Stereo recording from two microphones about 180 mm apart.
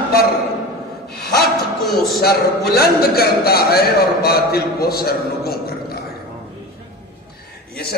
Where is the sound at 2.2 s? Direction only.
60° left (ahead or behind).